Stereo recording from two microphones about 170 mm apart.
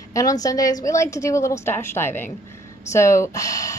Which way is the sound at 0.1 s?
20° left (ahead or behind).